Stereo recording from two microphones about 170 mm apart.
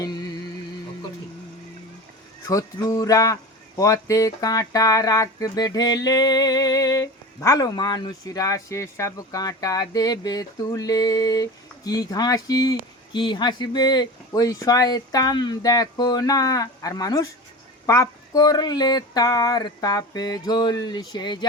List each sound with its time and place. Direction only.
2.5 s speech: 20° left (ahead or behind)